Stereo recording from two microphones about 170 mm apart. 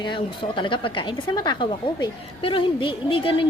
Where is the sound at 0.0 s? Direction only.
30° left (ahead or behind).